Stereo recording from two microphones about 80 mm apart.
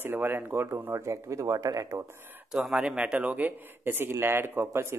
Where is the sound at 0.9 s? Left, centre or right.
Right.